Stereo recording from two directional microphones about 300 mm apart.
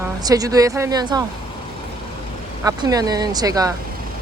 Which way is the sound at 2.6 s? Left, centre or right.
Centre.